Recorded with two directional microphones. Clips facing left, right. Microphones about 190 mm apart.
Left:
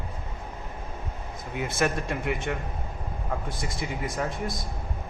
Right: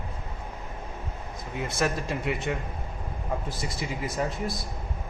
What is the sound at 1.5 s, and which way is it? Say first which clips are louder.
Speech: left 1 dB; centre (ahead or behind).